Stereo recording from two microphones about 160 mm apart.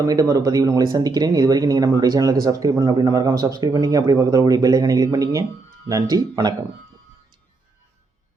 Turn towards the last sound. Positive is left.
turn(degrees=-25)  # may be behind; listen again after turning